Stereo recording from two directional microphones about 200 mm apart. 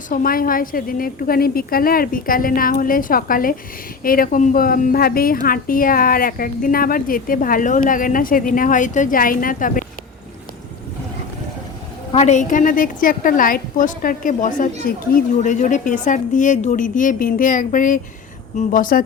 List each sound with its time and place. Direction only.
0.1 s speech: 45° left (ahead or behind)
12.1 s a woman's voice: 35° left (ahead or behind)